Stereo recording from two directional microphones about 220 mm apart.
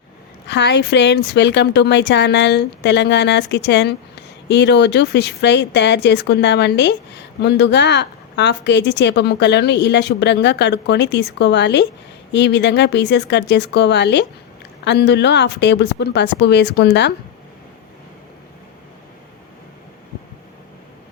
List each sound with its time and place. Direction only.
0.4 s a woman's voice: 50° left (ahead or behind)